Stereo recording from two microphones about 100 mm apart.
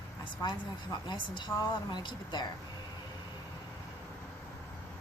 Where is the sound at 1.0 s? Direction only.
50° left (ahead or behind).